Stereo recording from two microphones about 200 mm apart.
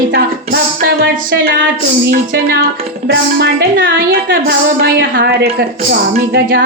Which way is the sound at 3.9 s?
50° right (ahead or behind).